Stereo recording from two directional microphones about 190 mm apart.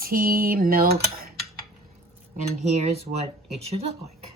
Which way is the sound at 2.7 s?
35° right (ahead or behind).